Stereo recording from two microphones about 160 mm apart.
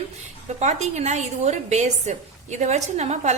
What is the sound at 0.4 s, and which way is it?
A woman's voice, 45° right (ahead or behind).